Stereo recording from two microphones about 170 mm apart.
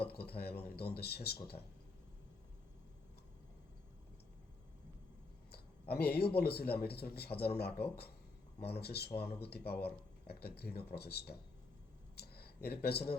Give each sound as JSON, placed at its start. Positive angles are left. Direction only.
{"t": 0.0, "sound": "speech", "side_deg": 70}
{"t": 5.9, "sound": "speech", "side_deg": 70}
{"t": 12.1, "sound": "a sound", "side_deg": 70}
{"t": 12.6, "sound": "speech", "side_deg": 70}